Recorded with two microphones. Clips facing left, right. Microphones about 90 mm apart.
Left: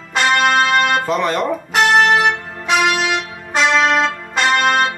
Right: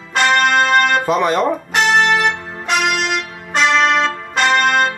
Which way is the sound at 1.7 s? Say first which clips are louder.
Left 3 dB; centre (ahead or behind).